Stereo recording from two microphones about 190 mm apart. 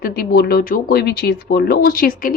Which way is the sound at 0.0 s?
55° left (ahead or behind).